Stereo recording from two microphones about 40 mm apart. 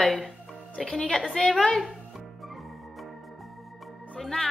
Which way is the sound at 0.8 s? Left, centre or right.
Left.